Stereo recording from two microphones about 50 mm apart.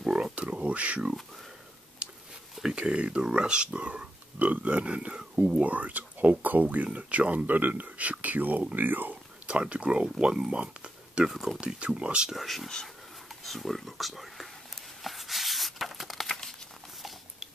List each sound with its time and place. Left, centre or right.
0.0 s a sound: centre
0.5 s speech: right
2.6 s speech: centre; by 9.2 s right
9.5 s speech: right
10.2 s speech: centre
10.5 s a sound: right
11.2 s speech: centre
11.6 s speech: right
12.3 s speech: centre
15.0 s a sound: centre